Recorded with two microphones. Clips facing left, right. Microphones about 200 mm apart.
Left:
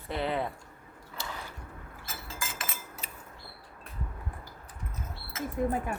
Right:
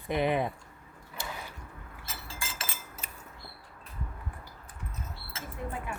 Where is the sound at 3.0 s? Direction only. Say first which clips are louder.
Left 1 dB; 50° right (ahead or behind).